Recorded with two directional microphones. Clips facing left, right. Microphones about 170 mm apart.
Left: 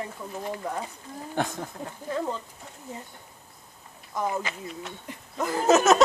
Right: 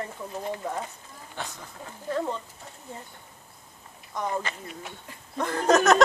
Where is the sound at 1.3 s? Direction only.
50° left (ahead or behind).